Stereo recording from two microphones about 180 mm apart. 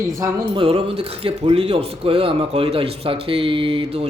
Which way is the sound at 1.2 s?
30° right (ahead or behind).